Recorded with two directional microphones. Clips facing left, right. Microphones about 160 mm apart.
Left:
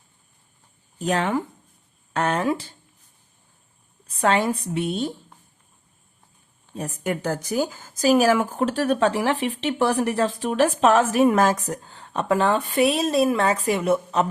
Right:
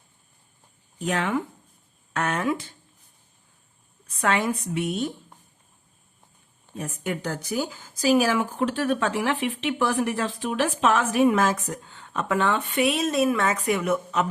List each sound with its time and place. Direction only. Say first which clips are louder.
0.9 s speech: left 3 dB; 35° left (ahead or behind)
4.0 s a woman's voice: left 3 dB; 30° left (ahead or behind)
6.7 s speech: left 3 dB; 40° left (ahead or behind)